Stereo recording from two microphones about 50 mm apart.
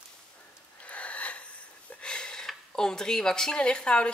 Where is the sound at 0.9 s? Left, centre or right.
Left.